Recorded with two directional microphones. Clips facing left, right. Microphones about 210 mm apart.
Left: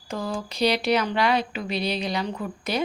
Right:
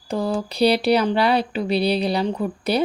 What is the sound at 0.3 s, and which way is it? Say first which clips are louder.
Speech: right 5 dB; 35° right (ahead or behind).